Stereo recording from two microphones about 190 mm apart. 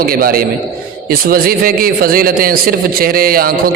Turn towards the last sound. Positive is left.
turn(degrees=-50)  # may be behind; listen again after turning